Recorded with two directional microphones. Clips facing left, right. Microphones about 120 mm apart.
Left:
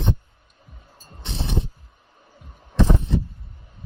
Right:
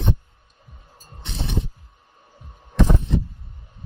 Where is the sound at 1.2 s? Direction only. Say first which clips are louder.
Left 1 dB; 30° left (ahead or behind).